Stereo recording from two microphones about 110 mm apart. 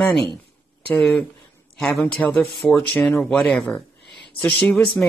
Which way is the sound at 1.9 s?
20° left (ahead or behind).